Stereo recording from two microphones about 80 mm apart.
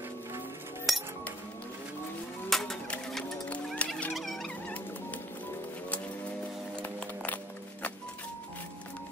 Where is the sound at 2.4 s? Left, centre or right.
Centre.